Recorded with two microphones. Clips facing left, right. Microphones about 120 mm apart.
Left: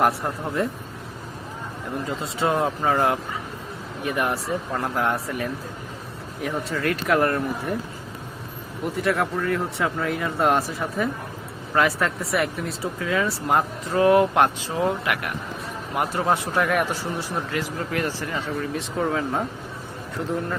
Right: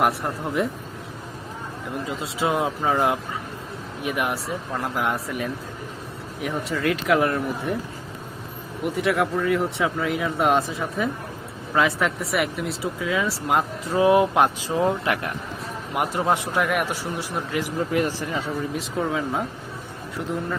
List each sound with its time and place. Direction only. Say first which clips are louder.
0.0 s speech: left 1 dB; centre (ahead or behind)
2.0 s speech: left 1 dB; 5° right (ahead or behind)
4.0 s speech: left 1 dB; 5° right (ahead or behind)
8.9 s speech: right 1 dB; centre (ahead or behind)
10.5 s speech: right 1 dB; 20° right (ahead or behind)
10.8 s speech: even; centre (ahead or behind)
13.9 s speech: even; 15° right (ahead or behind)
16.0 s speech: even; 15° right (ahead or behind)
18.8 s speech: left 3 dB; centre (ahead or behind)